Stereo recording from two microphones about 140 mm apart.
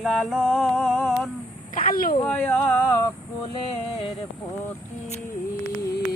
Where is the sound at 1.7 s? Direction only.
85° left.